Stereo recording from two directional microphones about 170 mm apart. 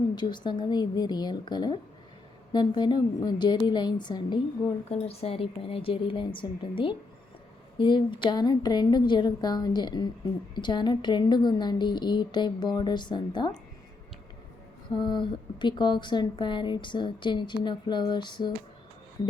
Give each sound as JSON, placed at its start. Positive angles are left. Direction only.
{"t": 0.2, "sound": "a woman's voice", "side_deg": 25}
{"t": 4.9, "sound": "a woman's voice", "side_deg": 35}
{"t": 14.8, "sound": "a woman's voice", "side_deg": 25}